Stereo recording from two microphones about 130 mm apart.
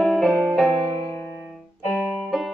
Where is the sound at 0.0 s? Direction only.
Centre (ahead or behind).